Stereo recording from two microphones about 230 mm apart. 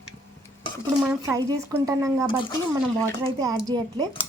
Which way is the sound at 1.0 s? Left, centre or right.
Centre.